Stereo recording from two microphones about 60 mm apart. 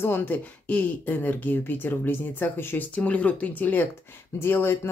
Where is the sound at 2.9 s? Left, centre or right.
Left.